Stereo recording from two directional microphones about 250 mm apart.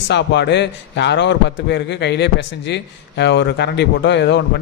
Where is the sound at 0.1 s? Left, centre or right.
Left.